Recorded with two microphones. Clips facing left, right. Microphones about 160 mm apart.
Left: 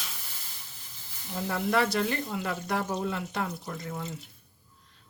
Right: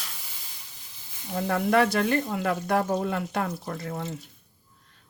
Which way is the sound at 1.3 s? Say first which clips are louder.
Right 5 dB; 55° right (ahead or behind).